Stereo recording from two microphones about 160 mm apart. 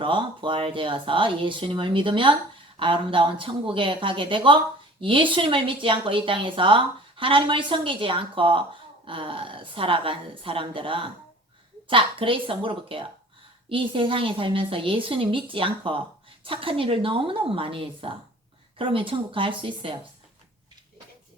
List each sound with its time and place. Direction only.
0.0 s speech: 30° right (ahead or behind)